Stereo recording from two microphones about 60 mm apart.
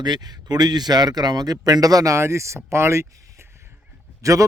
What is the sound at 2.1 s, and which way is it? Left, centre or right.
Speech, right.